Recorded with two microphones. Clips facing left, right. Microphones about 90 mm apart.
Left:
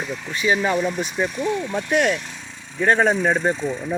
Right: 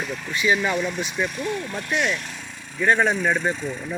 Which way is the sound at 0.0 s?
5° left (ahead or behind).